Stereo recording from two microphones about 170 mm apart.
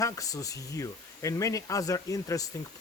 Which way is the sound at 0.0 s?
20° left (ahead or behind).